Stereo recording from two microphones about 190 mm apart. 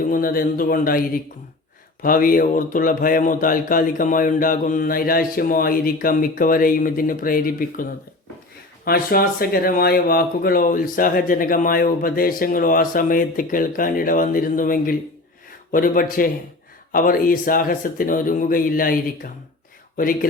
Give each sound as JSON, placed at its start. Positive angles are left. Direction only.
{"t": 0.0, "sound": "speech", "side_deg": 50}